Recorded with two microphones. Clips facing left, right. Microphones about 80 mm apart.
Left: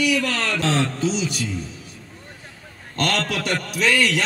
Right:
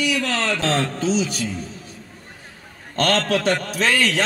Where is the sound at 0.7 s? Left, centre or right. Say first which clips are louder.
Even; right.